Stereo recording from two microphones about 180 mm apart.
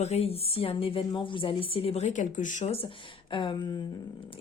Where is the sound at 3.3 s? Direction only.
25° left (ahead or behind).